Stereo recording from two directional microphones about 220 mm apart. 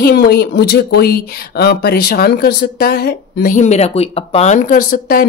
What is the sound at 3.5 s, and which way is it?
A woman's voice, 30° left (ahead or behind).